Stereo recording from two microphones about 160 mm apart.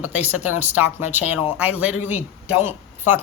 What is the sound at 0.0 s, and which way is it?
Speech, 10° right (ahead or behind).